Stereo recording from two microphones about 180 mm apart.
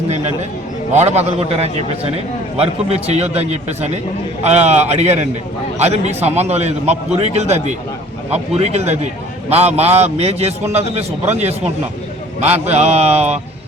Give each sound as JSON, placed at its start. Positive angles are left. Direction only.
{"t": 0.9, "sound": "a man's voice", "side_deg": -35}